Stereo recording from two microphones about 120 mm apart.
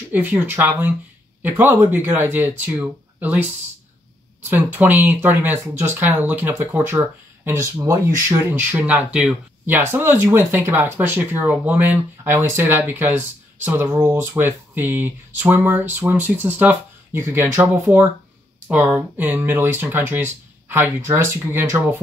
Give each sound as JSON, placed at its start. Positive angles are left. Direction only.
{"t": 0.1, "sound": "speech", "side_deg": -15}
{"t": 4.5, "sound": "speech", "side_deg": -15}